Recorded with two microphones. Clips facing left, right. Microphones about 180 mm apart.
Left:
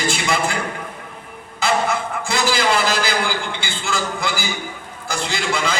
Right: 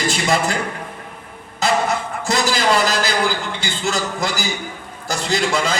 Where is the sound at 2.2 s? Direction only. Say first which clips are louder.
Right 2 dB; 40° right (ahead or behind).